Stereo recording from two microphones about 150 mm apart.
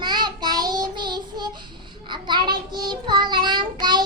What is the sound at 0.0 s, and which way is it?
Child singing, 30° right (ahead or behind).